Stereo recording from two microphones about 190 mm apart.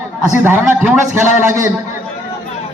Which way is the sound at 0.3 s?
10° right (ahead or behind).